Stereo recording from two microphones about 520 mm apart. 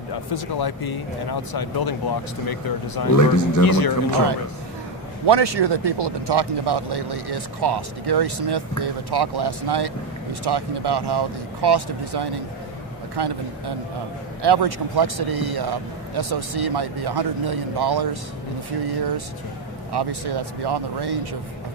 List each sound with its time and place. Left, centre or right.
0.1 s speech: left
5.2 s speech: right